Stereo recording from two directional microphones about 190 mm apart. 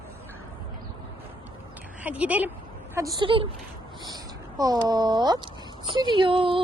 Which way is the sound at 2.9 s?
20° right (ahead or behind).